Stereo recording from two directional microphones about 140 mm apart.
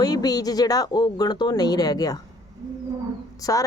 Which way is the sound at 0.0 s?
30° left (ahead or behind).